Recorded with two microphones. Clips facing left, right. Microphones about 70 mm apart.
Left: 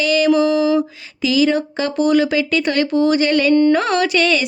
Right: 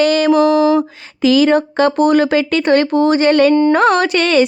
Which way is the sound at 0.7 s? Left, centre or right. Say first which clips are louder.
Right 2 dB; right.